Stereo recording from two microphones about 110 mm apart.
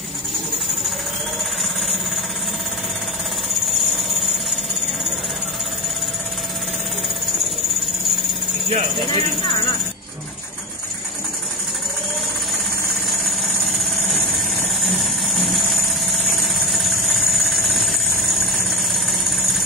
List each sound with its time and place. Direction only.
8.7 s speech: 50° right (ahead or behind)
13.1 s engine: centre (ahead or behind)
14.8 s vehicle: centre (ahead or behind)